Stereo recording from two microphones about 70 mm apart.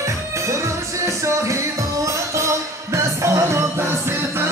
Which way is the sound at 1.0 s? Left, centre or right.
Right.